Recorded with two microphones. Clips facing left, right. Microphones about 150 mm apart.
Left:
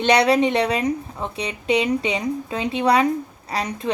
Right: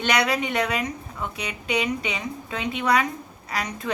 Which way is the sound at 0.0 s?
30° left (ahead or behind).